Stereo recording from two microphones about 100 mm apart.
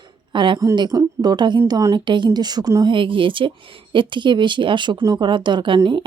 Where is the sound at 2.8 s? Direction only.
55° right (ahead or behind).